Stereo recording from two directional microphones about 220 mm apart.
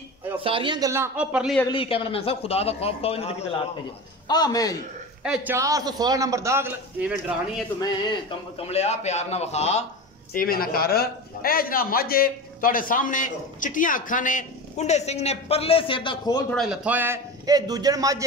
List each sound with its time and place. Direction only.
0.4 s a man's voice: 25° right (ahead or behind); by 1.6 s 5° right (ahead or behind)
1.7 s a man's voice: 25° left (ahead or behind)
5.2 s a man's voice: 5° right (ahead or behind)
8.5 s a man's voice: 30° left (ahead or behind)
10.3 s a man's voice: 40° left (ahead or behind); by 16.4 s 20° left (ahead or behind)
16.4 s a man's voice: centre (ahead or behind); by 18.2 s 15° right (ahead or behind)